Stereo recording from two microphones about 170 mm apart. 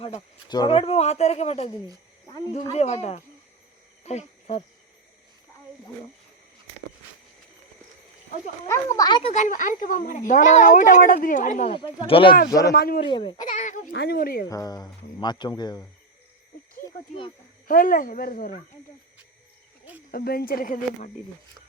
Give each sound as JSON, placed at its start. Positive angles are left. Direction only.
{"t": 0.4, "sound": "speech", "side_deg": 25}
{"t": 4.0, "sound": "cricket", "side_deg": 40}
{"t": 8.6, "sound": "speech", "side_deg": 15}
{"t": 9.3, "sound": "speech", "side_deg": 50}
{"t": 11.7, "sound": "speech", "side_deg": 30}
{"t": 12.5, "sound": "speech", "side_deg": 20}
{"t": 12.7, "sound": "speech", "side_deg": 65}
{"t": 13.0, "sound": "speech", "side_deg": 30}
{"t": 13.5, "sound": "speech", "side_deg": 45}
{"t": 13.9, "sound": "speech", "side_deg": 75}
{"t": 14.5, "sound": "speech", "side_deg": 20}
{"t": 17.7, "sound": "speech", "side_deg": 55}
{"t": 20.1, "sound": "speech", "side_deg": 60}